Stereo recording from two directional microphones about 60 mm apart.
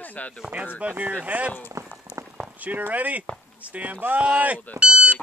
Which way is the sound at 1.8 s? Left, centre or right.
Right.